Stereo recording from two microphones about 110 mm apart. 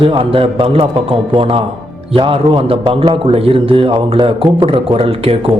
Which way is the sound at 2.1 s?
50° right (ahead or behind).